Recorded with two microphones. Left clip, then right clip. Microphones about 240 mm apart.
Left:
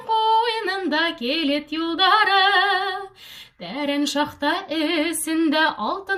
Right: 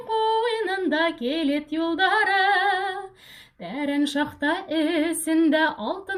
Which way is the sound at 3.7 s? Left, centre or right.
Centre.